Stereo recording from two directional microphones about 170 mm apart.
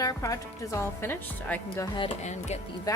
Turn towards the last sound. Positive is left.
turn(degrees=20)  # may be behind; listen again after turning